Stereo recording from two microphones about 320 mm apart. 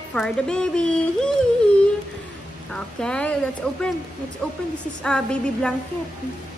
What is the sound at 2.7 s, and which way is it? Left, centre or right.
A woman's voice, centre.